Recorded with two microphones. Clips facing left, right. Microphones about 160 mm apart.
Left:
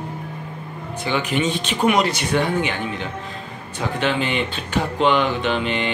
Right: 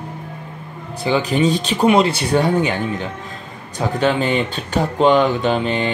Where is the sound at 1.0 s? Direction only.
35° right (ahead or behind).